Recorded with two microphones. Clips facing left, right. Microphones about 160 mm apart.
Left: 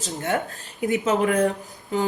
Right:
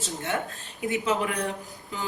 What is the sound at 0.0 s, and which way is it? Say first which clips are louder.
A woman's voice: left 4 dB; 40° left (ahead or behind).